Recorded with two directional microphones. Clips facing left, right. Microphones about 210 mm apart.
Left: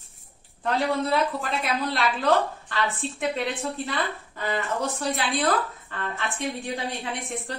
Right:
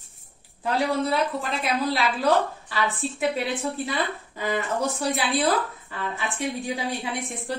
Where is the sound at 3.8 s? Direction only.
15° right (ahead or behind).